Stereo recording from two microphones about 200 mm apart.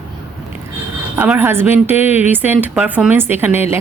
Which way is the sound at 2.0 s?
35° left (ahead or behind).